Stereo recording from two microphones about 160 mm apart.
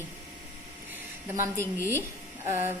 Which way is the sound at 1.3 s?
15° right (ahead or behind).